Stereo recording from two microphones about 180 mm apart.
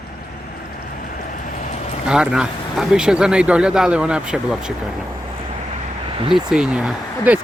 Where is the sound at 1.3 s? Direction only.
40° left (ahead or behind).